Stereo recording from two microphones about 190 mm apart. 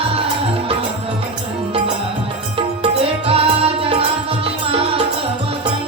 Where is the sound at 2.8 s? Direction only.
30° right (ahead or behind).